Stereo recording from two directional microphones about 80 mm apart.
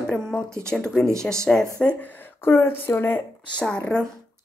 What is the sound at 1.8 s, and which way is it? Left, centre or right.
Speech, centre.